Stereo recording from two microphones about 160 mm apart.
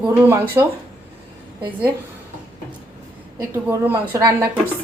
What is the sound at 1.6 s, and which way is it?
Speech, 30° right (ahead or behind).